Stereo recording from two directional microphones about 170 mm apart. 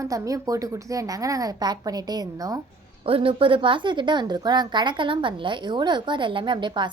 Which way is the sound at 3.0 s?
35° right (ahead or behind).